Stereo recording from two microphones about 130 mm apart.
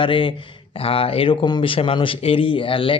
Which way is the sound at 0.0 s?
40° left (ahead or behind).